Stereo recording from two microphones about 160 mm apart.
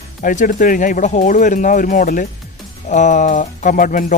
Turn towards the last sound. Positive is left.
turn(degrees=60)  # may be behind; listen again after turning